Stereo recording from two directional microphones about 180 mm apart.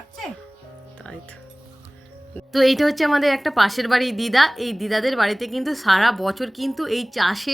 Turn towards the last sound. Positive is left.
turn(degrees=0)  # may be behind; listen again after turning